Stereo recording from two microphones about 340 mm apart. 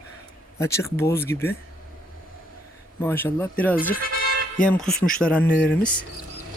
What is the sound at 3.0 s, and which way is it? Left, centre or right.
Speech, centre.